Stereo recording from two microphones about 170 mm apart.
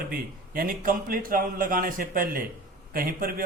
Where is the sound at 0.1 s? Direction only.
60° right (ahead or behind).